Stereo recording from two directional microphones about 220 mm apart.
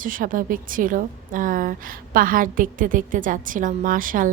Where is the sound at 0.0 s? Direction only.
40° right (ahead or behind).